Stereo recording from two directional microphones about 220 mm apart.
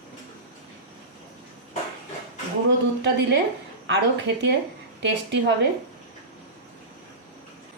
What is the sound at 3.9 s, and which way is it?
Speech, 50° right (ahead or behind).